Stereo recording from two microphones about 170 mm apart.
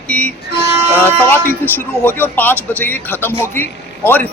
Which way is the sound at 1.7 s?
10° left (ahead or behind).